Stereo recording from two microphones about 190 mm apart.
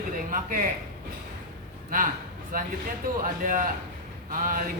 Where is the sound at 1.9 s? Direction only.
45° right (ahead or behind).